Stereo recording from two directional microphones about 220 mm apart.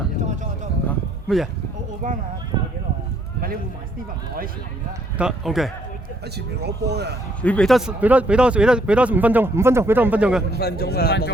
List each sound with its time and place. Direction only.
0.9 s a sound: centre (ahead or behind)
2.0 s speech: 35° right (ahead or behind)
5.1 s speech: 5° right (ahead or behind)
6.6 s speech: 50° right (ahead or behind)
7.4 s speech: 5° left (ahead or behind)
10.6 s a man's voice: 45° left (ahead or behind)